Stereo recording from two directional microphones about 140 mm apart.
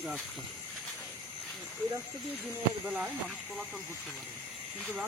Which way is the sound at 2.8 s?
Centre (ahead or behind).